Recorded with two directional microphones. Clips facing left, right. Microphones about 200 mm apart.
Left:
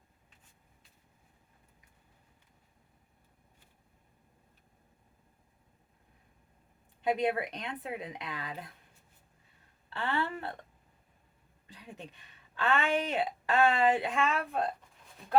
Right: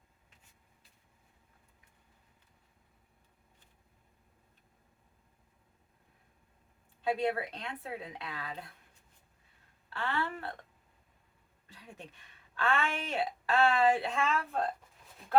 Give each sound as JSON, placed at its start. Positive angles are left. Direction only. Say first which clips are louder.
{"t": 7.0, "sound": "speech", "louder": "left 2 dB", "side_deg": 15}
{"t": 9.9, "sound": "speech", "louder": "left 2 dB", "side_deg": 20}
{"t": 12.5, "sound": "speech", "louder": "left 3 dB", "side_deg": 20}